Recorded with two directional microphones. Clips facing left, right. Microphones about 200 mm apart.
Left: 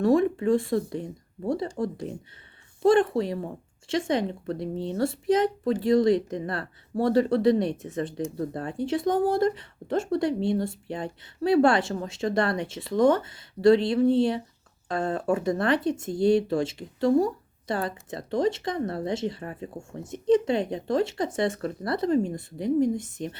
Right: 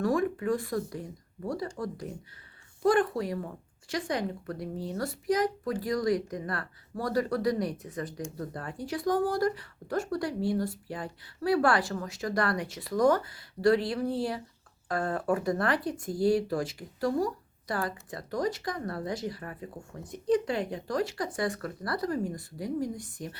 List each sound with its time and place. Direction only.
0.0 s speech: 25° left (ahead or behind)